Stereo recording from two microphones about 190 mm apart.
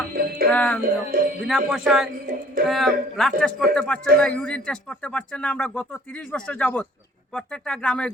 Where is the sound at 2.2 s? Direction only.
45° right (ahead or behind).